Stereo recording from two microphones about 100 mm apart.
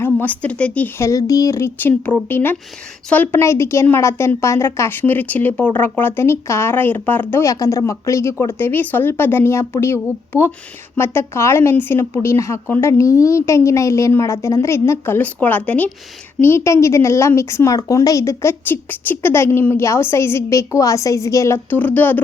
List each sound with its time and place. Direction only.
0.0 s speech: 20° left (ahead or behind)
0.9 s a woman's voice: 30° left (ahead or behind)
18.7 s a woman's voice: 20° left (ahead or behind)